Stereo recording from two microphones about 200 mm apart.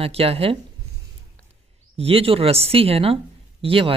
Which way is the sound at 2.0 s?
30° right (ahead or behind).